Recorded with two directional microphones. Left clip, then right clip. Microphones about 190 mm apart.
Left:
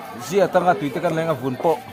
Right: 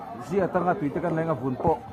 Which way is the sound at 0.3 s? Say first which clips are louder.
Left 7 dB; 90° left.